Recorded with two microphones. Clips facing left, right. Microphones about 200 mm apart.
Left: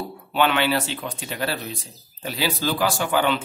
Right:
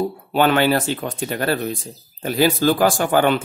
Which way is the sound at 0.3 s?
45° right (ahead or behind).